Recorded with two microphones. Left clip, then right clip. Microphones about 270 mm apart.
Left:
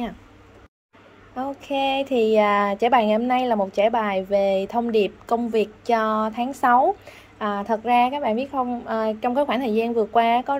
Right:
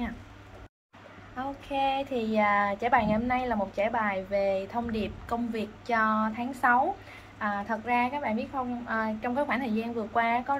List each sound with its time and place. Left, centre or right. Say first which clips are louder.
1.3 s speech: left 6 dB; left